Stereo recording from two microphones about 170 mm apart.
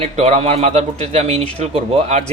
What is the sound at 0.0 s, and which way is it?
Speech, 40° right (ahead or behind).